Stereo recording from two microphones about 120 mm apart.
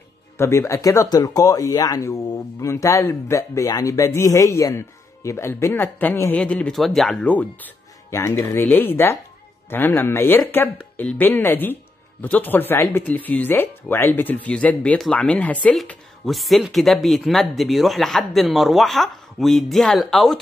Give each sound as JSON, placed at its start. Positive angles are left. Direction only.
{"t": 0.4, "sound": "a woman's voice", "side_deg": 25}
{"t": 8.1, "sound": "a woman's voice", "side_deg": 20}
{"t": 16.3, "sound": "speech", "side_deg": 0}